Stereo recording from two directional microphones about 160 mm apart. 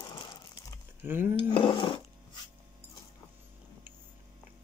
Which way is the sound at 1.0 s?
15° right (ahead or behind).